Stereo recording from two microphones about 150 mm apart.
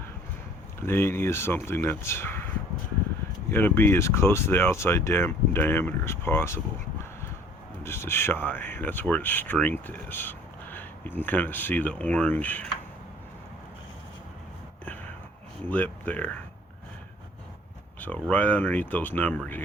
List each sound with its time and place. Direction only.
0.8 s speech: 15° left (ahead or behind)
3.5 s speech: 15° left (ahead or behind)
7.9 s speech: 15° left (ahead or behind)
15.7 s speech: 10° left (ahead or behind)
18.0 s speech: 10° left (ahead or behind)